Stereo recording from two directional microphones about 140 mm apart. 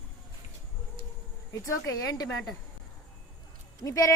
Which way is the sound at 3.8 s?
20° left (ahead or behind).